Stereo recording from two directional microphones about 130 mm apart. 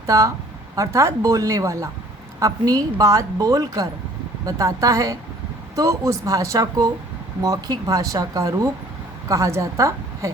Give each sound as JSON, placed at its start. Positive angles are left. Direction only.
{"t": 0.0, "sound": "a woman's voice", "side_deg": -25}